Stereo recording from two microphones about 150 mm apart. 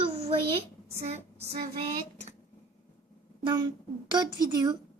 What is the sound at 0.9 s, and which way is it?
Speech, 45° right (ahead or behind).